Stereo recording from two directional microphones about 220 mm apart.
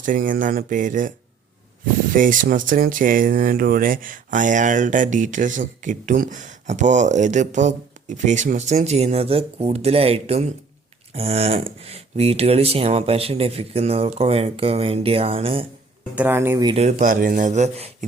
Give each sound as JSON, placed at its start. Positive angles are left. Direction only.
{"t": 0.0, "sound": "speech", "side_deg": -35}
{"t": 2.1, "sound": "speech", "side_deg": -35}
{"t": 16.1, "sound": "speech", "side_deg": -10}